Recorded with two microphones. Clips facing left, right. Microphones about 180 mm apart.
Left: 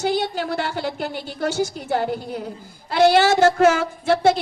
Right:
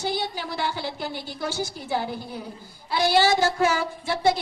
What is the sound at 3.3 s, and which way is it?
Music, 70° left (ahead or behind).